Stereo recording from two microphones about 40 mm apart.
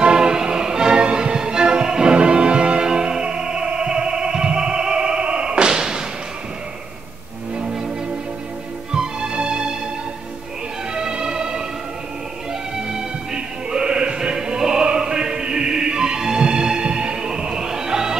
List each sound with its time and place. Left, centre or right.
0.0 s music: centre
7.5 s music: centre
8.9 s music: centre
11.0 s music: right
12.7 s music: centre